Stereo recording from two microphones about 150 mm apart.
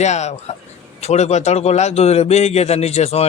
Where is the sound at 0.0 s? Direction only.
50° left (ahead or behind).